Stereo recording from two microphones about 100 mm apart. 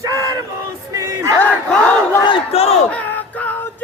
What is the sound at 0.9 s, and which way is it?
Battle cry, 30° right (ahead or behind).